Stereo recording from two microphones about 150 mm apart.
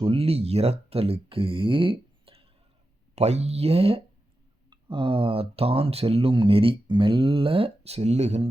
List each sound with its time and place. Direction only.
0.0 s speech: 40° right (ahead or behind)